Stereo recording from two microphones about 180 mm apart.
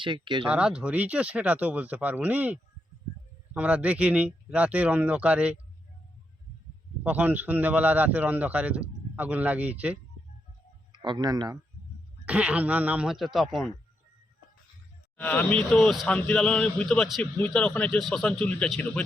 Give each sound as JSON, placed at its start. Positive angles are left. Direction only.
{"t": 0.0, "sound": "speech", "side_deg": -25}
{"t": 0.4, "sound": "a man's voice", "side_deg": -5}
{"t": 7.0, "sound": "a man's voice", "side_deg": -10}
{"t": 10.9, "sound": "speech", "side_deg": -25}
{"t": 12.2, "sound": "a man's voice", "side_deg": -5}
{"t": 15.2, "sound": "speech", "side_deg": 10}